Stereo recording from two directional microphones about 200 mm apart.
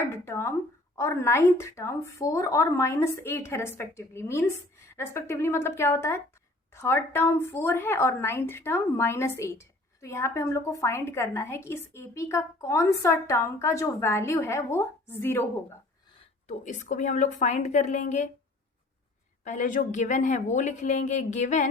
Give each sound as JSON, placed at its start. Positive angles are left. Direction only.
{"t": 0.1, "sound": "a sound", "side_deg": 15}
{"t": 0.9, "sound": "a woman's voice", "side_deg": 15}
{"t": 16.5, "sound": "a woman's voice", "side_deg": 35}
{"t": 19.5, "sound": "a woman's voice", "side_deg": 40}